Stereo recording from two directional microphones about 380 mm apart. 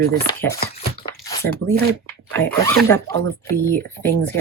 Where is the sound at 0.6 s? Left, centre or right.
Centre.